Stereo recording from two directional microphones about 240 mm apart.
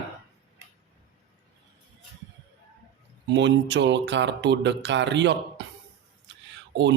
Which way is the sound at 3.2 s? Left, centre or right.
Right.